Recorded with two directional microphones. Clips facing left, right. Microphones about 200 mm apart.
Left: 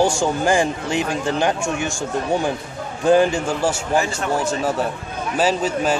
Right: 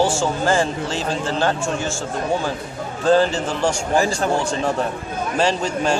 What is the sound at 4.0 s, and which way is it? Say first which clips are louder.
Speech: right 4 dB; 35° right (ahead or behind).